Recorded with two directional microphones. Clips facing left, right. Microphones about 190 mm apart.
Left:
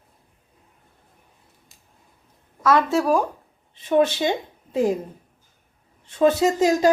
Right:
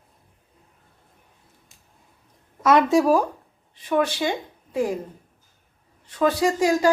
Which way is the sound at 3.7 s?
25° left (ahead or behind).